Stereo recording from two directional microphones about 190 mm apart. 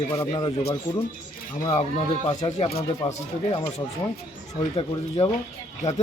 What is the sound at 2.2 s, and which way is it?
Speech, 30° left (ahead or behind).